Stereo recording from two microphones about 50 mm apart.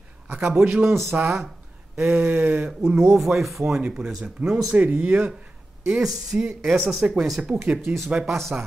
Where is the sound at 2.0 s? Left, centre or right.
Right.